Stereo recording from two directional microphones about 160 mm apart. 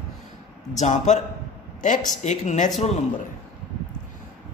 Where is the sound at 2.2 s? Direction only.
45° left (ahead or behind).